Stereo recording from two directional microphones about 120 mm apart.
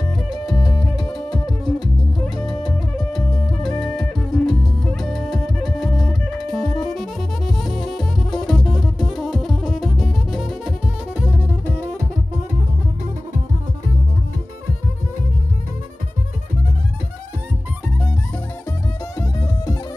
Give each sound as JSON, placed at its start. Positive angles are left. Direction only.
{"t": 0.3, "sound": "music", "side_deg": 0}
{"t": 19.1, "sound": "music", "side_deg": 25}